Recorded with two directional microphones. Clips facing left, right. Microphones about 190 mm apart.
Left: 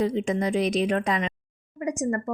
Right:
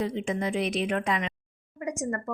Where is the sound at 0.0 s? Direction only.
40° left (ahead or behind).